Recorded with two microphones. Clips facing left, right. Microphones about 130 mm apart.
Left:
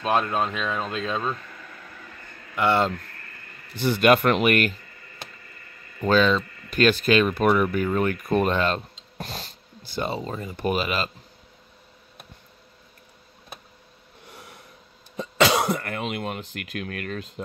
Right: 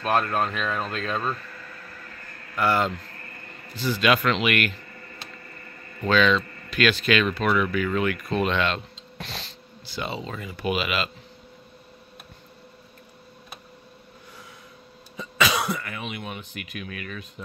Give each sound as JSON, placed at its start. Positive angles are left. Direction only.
{"t": 0.0, "sound": "speech", "side_deg": 15}
{"t": 2.5, "sound": "speech", "side_deg": 25}
{"t": 3.7, "sound": "speech", "side_deg": 60}
{"t": 6.0, "sound": "speech", "side_deg": 40}
{"t": 15.1, "sound": "cough", "side_deg": 60}
{"t": 15.6, "sound": "speech", "side_deg": 50}